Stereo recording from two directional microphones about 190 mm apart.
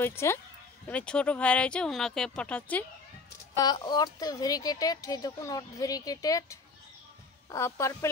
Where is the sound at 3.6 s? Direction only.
20° left (ahead or behind).